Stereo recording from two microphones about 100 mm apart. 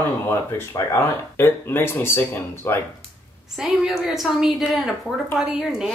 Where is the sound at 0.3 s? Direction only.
25° left (ahead or behind).